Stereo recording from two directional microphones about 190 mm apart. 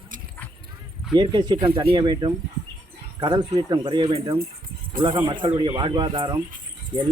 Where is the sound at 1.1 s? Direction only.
25° right (ahead or behind).